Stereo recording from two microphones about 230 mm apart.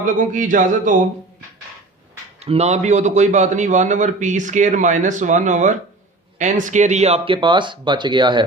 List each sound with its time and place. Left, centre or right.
0.0 s a man's voice: right
2.4 s a man's voice: right